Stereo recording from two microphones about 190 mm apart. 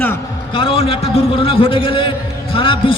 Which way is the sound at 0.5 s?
30° left (ahead or behind).